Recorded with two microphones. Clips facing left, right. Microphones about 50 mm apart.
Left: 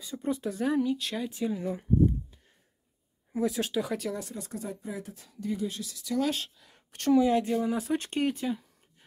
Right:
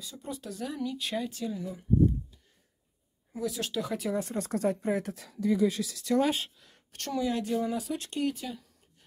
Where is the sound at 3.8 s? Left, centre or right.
Centre.